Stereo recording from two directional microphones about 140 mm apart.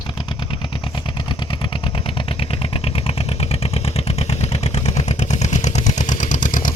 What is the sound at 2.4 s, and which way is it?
Vehicle, 40° left (ahead or behind).